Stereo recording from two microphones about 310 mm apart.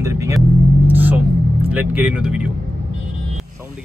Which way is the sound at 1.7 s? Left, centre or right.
Centre.